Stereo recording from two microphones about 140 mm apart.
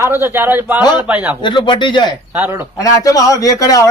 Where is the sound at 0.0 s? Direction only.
15° right (ahead or behind).